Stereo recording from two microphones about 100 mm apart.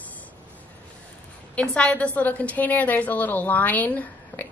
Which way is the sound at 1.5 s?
10° left (ahead or behind).